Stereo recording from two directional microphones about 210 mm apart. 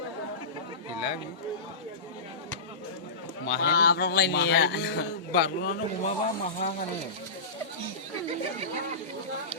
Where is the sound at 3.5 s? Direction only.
45° left (ahead or behind).